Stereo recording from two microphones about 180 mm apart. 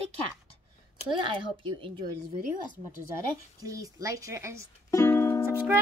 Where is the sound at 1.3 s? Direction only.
25° right (ahead or behind).